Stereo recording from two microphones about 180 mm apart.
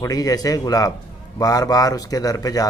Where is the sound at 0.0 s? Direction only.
20° left (ahead or behind).